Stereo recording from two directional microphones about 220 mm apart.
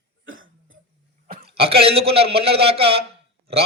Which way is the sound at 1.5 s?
25° right (ahead or behind).